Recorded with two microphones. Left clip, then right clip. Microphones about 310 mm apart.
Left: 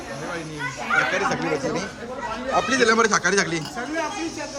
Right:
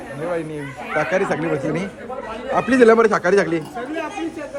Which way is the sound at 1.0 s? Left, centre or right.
Centre.